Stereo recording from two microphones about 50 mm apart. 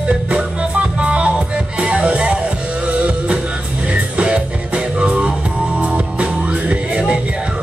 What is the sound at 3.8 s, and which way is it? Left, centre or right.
Music, right.